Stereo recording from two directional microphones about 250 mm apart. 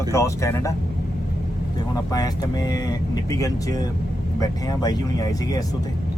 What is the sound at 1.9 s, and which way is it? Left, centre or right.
Speech, centre.